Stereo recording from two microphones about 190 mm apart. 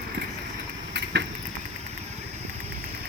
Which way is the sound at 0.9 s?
65° right (ahead or behind).